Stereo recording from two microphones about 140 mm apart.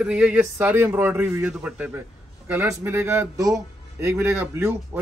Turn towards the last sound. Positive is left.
turn(degrees=-20)  # may be behind; listen again after turning